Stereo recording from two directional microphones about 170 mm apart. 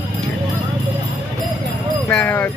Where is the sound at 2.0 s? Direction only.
5° left (ahead or behind).